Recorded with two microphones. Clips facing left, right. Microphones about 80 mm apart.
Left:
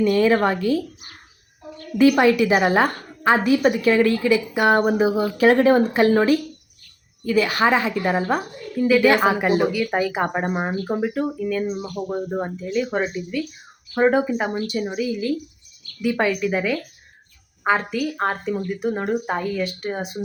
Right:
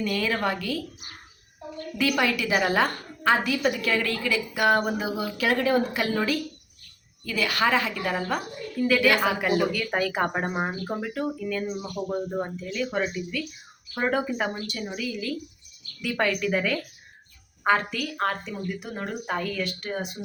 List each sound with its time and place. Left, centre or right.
0.0 s a woman's voice: left
2.0 s a woman's voice: left
9.7 s a woman's voice: centre
17.7 s a woman's voice: left